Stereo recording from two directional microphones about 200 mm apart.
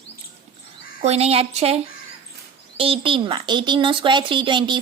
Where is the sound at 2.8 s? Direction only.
25° right (ahead or behind).